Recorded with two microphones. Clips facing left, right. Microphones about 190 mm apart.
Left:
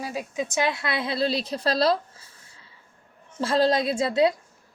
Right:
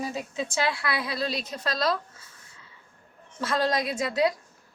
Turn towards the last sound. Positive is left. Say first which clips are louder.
# left 4 dB
turn(degrees=25)  # may be behind; listen again after turning